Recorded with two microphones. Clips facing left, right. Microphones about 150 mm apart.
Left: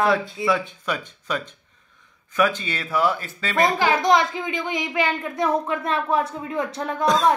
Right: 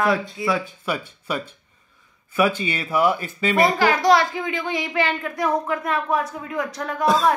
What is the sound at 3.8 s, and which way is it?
Speech, 20° left (ahead or behind).